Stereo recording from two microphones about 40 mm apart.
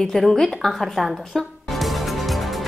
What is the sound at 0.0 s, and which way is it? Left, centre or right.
A woman's voice, centre.